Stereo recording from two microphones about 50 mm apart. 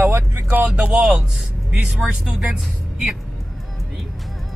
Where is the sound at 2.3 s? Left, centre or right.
Right.